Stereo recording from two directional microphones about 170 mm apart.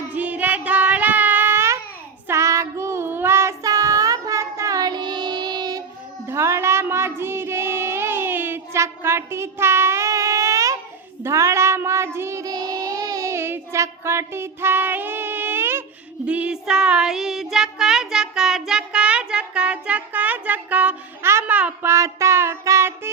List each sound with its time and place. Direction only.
0.1 s child singing: 10° right (ahead or behind)